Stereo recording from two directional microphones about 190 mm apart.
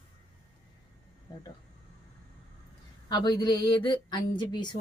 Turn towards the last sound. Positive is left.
turn(degrees=25)  # may be behind; listen again after turning